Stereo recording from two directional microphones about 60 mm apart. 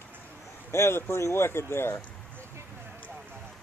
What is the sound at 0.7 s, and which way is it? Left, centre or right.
Speech, left.